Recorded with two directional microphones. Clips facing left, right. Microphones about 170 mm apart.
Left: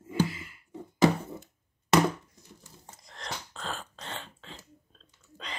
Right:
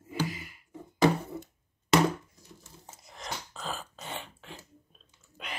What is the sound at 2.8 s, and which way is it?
Burping, 5° right (ahead or behind).